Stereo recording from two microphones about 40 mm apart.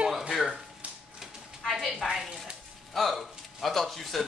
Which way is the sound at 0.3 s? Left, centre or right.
Centre.